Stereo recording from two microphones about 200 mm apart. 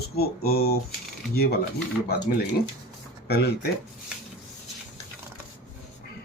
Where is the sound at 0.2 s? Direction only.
50° left (ahead or behind).